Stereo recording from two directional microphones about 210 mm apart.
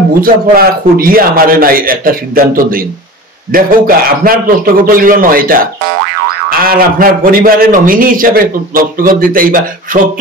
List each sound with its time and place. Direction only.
0.2 s a man's voice: 45° right (ahead or behind)
6.6 s a man's voice: 45° right (ahead or behind)